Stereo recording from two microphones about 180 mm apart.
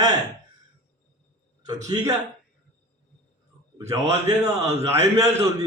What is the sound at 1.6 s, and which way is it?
Speech, 20° right (ahead or behind).